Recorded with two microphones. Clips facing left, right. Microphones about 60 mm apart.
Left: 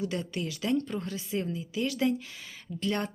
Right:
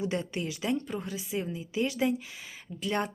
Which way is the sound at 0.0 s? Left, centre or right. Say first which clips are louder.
Right 1 dB; right.